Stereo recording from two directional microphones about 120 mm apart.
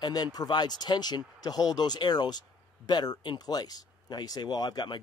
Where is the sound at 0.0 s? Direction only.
35° left (ahead or behind).